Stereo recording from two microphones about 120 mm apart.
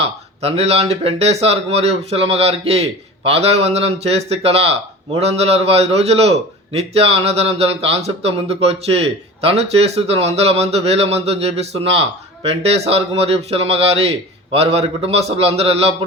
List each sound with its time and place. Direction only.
0.0 s speech: 60° right (ahead or behind)